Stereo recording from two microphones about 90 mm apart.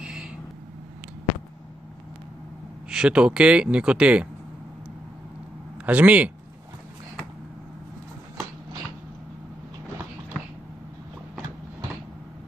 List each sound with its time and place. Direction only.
0.0 s vehicle: 10° right (ahead or behind)
2.9 s speech: 10° right (ahead or behind)
5.9 s speech: 15° right (ahead or behind)